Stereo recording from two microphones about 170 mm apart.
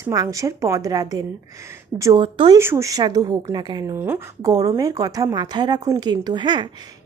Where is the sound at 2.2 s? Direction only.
30° right (ahead or behind).